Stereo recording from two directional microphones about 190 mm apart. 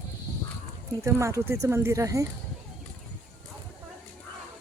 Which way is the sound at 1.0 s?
15° right (ahead or behind).